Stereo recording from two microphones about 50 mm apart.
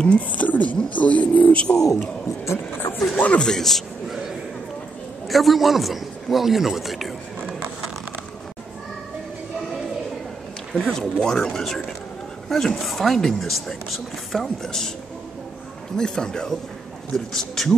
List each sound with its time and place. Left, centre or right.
0.0 s speech: left
2.2 s speech: left
2.8 s a sound: left
3.3 s speech: centre
5.3 s speech: centre
10.7 s speech: centre
16.0 s speech: centre